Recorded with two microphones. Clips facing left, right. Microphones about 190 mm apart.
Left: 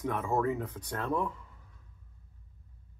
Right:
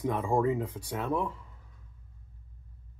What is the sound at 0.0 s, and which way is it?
Speech, 15° right (ahead or behind).